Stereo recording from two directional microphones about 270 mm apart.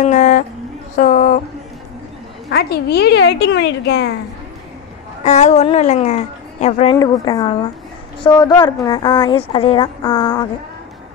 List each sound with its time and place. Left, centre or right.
0.0 s a sound: left
0.9 s speech: left
2.5 s a woman's voice: left
5.2 s a woman's voice: left